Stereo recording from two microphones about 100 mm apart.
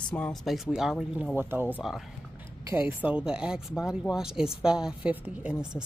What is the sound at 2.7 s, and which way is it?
A woman's voice, 15° right (ahead or behind).